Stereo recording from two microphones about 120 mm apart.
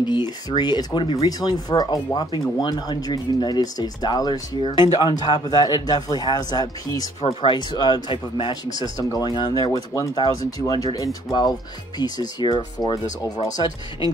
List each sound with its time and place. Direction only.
0.0 s speech: 40° left (ahead or behind)
8.8 s speech: 30° left (ahead or behind)